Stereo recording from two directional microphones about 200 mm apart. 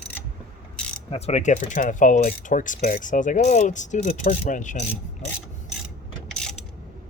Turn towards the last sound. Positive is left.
turn(degrees=5)  # may be behind; listen again after turning